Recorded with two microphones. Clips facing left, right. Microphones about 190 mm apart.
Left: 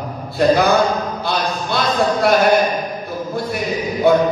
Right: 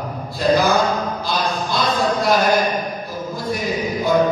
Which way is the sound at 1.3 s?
65° left (ahead or behind).